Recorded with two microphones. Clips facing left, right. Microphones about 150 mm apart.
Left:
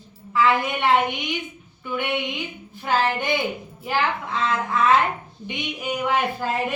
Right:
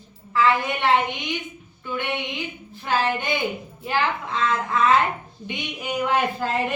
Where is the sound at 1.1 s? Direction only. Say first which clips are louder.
Left 1 dB; 20° right (ahead or behind).